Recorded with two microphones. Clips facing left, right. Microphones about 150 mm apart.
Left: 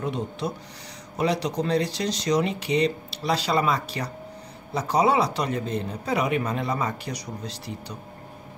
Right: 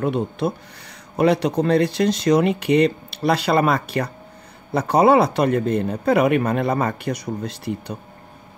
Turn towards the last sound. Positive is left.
turn(degrees=-55)  # may be behind; listen again after turning